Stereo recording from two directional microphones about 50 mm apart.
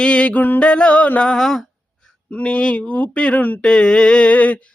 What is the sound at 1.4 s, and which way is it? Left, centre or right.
Mantra, centre.